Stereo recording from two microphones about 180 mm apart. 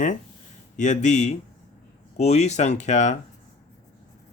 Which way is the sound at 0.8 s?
40° left (ahead or behind).